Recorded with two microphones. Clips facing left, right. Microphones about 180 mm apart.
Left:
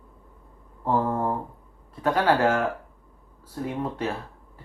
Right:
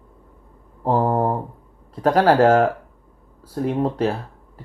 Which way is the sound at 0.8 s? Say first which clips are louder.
Right 5 dB; 45° right (ahead or behind).